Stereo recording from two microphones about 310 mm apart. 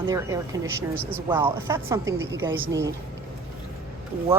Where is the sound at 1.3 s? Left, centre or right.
Centre.